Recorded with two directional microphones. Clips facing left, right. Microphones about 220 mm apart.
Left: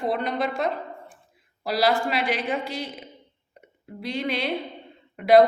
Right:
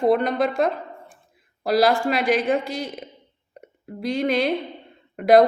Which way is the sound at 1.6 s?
45° right (ahead or behind).